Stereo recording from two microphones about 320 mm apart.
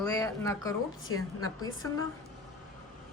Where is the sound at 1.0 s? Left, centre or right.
Left.